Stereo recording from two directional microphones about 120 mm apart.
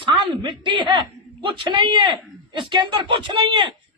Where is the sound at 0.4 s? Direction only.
40° right (ahead or behind).